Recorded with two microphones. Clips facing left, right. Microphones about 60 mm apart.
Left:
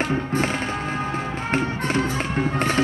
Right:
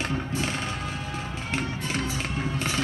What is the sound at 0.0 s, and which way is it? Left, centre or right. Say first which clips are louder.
Music: left 6 dB; left.